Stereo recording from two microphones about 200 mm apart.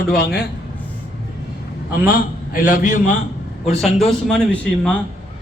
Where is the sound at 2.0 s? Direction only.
45° left (ahead or behind).